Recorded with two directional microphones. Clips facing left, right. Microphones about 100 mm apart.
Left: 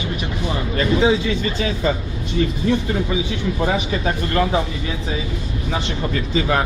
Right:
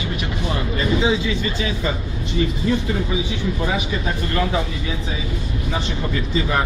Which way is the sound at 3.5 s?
45° left (ahead or behind).